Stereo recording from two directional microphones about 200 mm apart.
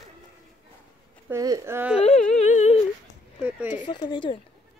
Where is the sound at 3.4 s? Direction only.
5° right (ahead or behind).